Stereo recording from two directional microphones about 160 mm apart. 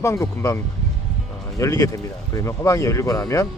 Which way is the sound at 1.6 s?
20° left (ahead or behind).